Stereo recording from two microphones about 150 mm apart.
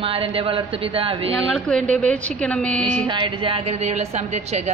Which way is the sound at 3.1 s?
35° right (ahead or behind).